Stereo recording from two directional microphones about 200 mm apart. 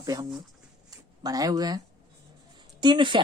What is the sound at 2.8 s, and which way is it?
Speech, 25° right (ahead or behind).